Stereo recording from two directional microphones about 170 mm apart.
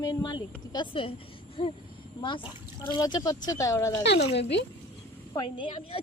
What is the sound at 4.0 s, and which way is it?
Speech, 90° left.